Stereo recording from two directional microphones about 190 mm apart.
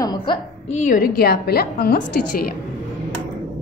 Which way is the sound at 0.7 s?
40° left (ahead or behind).